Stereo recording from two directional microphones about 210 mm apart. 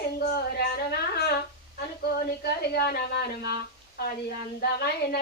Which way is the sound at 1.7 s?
50° left (ahead or behind).